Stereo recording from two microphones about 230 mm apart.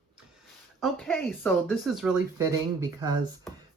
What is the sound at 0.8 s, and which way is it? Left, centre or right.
Speech, centre.